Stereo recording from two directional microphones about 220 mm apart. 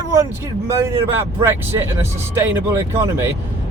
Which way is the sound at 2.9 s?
10° right (ahead or behind).